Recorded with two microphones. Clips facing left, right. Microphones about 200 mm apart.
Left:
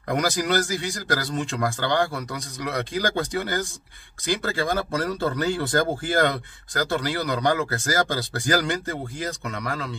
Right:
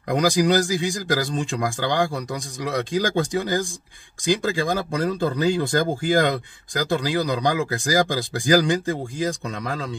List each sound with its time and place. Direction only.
0.1 s speech: 15° right (ahead or behind)